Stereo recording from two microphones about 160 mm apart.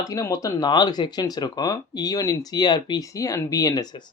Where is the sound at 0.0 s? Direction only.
20° left (ahead or behind).